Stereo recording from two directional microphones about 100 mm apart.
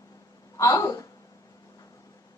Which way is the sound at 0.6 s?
35° left (ahead or behind).